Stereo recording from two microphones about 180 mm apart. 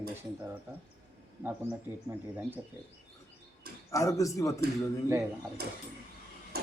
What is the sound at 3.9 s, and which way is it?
Speech, 15° left (ahead or behind).